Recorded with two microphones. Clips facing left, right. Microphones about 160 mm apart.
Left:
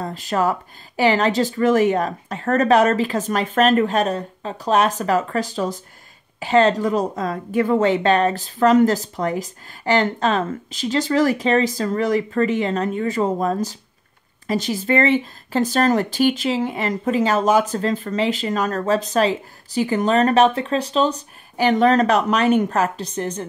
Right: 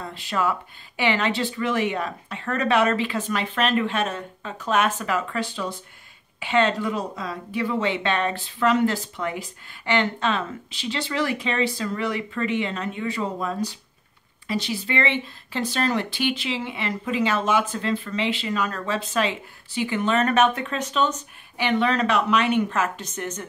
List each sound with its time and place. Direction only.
0.0 s speech: 40° left (ahead or behind)